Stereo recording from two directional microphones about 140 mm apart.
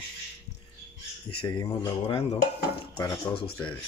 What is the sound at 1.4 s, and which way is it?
Speech, 30° left (ahead or behind).